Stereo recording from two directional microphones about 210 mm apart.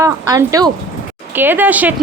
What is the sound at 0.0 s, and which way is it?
Speech, 15° right (ahead or behind).